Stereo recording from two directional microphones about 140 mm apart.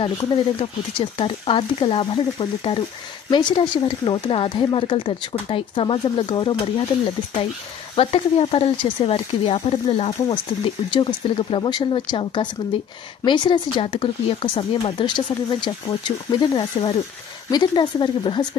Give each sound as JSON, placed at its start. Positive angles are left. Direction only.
{"t": 0.0, "sound": "speech", "side_deg": 40}
{"t": 7.9, "sound": "speech", "side_deg": 45}